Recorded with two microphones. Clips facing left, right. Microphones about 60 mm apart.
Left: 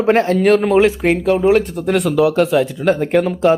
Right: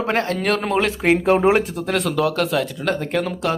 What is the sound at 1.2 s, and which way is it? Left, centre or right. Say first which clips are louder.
Speech: left 1 dB; right.